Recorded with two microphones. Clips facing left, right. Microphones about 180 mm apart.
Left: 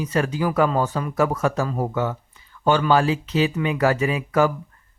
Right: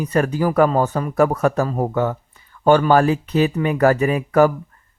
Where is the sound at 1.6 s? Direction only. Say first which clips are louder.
Right 4 dB; 40° right (ahead or behind).